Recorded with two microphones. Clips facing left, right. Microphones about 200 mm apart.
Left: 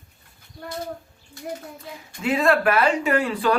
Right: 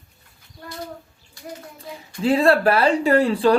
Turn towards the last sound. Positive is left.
turn(degrees=-30)  # may be behind; listen again after turning